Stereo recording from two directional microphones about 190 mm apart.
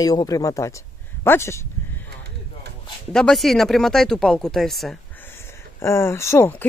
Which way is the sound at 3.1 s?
Centre (ahead or behind).